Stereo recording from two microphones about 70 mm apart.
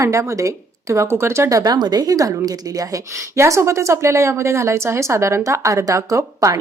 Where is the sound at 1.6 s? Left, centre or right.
Right.